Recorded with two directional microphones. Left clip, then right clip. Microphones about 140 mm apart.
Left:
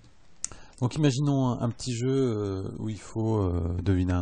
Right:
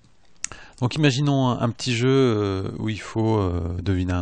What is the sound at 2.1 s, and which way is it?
Speech, 30° right (ahead or behind).